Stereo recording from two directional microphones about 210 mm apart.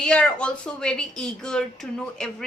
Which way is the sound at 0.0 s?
5° left (ahead or behind).